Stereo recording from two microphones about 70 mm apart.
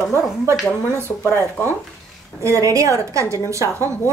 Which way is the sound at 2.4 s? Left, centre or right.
Right.